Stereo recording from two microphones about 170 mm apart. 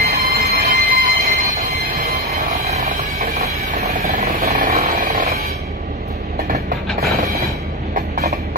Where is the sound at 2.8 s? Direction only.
60° right (ahead or behind).